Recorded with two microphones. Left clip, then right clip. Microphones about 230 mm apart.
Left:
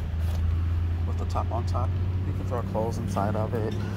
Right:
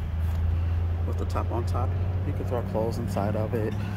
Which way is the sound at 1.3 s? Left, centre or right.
Right.